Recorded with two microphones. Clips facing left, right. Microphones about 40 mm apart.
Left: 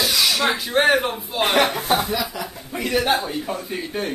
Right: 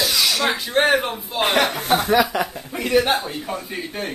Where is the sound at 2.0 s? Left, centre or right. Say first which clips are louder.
Right 7 dB; right.